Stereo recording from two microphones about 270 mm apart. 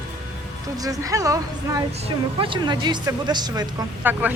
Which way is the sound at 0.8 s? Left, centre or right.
Centre.